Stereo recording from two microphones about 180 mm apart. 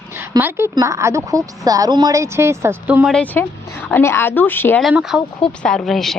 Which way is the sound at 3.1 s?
10° left (ahead or behind).